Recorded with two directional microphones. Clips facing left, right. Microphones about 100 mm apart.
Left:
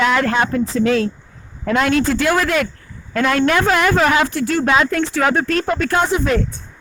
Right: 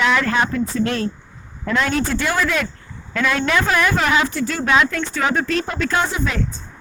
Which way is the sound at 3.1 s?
50° left (ahead or behind).